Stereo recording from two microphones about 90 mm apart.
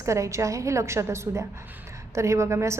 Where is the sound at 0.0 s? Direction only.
35° right (ahead or behind).